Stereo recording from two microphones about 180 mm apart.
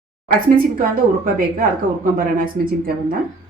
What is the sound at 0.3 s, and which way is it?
A woman's voice, 55° right (ahead or behind).